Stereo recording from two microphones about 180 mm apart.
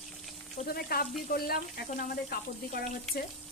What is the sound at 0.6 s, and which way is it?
Speech, 55° left (ahead or behind).